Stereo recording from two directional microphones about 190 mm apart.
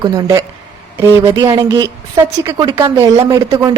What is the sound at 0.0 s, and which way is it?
A woman's voice, 20° right (ahead or behind).